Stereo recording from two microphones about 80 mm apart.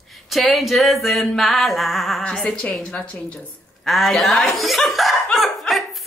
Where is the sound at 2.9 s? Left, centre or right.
Centre.